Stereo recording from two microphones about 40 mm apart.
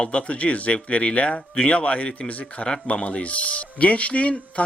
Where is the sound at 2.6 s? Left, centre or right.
Left.